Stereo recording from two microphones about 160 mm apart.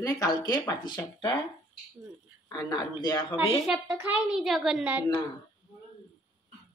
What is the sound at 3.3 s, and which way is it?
A woman's voice, centre (ahead or behind).